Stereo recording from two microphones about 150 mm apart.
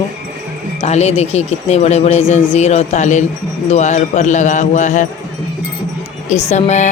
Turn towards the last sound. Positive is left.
turn(degrees=50)  # may be behind; listen again after turning